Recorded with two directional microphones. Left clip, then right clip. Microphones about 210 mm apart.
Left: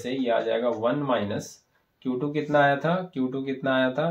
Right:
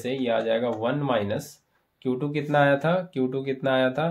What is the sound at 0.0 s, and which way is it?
Speech, 50° right (ahead or behind).